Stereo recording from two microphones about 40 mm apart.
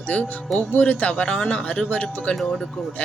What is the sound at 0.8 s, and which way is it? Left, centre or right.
Speech, left.